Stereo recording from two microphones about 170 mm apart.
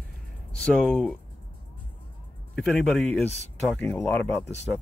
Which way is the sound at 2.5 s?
Centre (ahead or behind).